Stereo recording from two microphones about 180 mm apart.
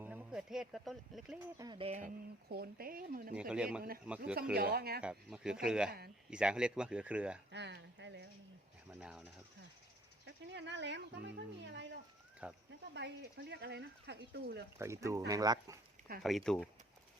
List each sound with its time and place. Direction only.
0.0 s speech: 10° right (ahead or behind)
1.5 s speech: 25° right (ahead or behind)
1.9 s speech: 45° right (ahead or behind)
3.3 s speech: 5° right (ahead or behind)
4.5 s speech: 60° right (ahead or behind)
4.9 s speech: 5° right (ahead or behind)
7.5 s speech: 70° right (ahead or behind)
8.9 s speech: 5° right (ahead or behind)
10.2 s speech: 75° right (ahead or behind)
12.4 s speech: 5° right (ahead or behind)
12.9 s speech: 70° right (ahead or behind)
14.8 s speech: 15° right (ahead or behind)
16.2 s speech: centre (ahead or behind)